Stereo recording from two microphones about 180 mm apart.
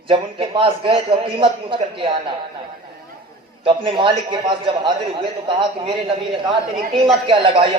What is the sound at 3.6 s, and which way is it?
A man's voice, 30° right (ahead or behind).